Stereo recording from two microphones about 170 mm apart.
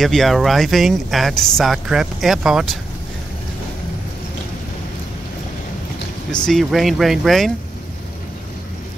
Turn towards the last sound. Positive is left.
turn(degrees=0)  # may be behind; listen again after turning